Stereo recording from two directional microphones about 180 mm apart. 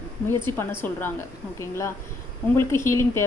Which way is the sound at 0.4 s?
15° left (ahead or behind).